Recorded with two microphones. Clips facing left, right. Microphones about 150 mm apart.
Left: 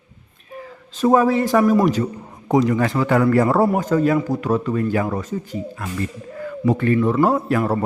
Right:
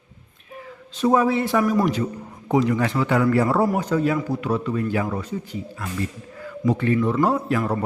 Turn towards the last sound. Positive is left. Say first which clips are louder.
# left 3 dB
turn(degrees=45)  # may be behind; listen again after turning